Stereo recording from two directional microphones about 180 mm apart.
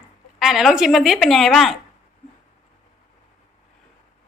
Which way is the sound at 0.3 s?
Centre (ahead or behind).